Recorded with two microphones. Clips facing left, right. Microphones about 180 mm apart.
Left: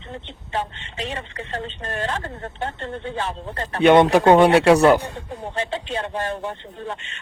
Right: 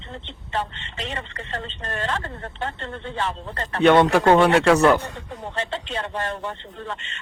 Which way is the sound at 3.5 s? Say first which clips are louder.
Left 2 dB; 10° left (ahead or behind).